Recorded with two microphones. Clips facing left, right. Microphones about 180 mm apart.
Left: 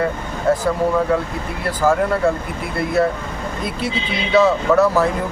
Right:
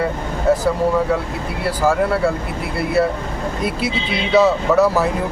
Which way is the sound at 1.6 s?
10° right (ahead or behind).